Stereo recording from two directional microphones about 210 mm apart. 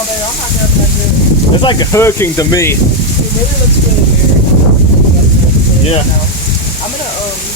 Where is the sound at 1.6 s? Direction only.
15° left (ahead or behind).